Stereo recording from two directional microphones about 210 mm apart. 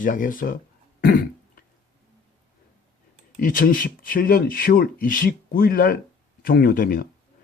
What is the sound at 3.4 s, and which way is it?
Speech, 40° left (ahead or behind).